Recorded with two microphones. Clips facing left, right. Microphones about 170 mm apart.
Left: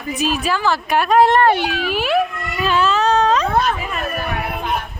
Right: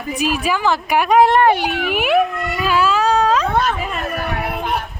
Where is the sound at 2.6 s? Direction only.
10° right (ahead or behind).